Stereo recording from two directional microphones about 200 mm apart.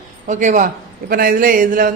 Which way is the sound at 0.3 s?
40° right (ahead or behind).